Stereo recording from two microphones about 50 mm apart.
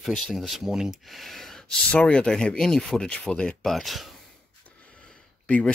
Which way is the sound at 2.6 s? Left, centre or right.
Centre.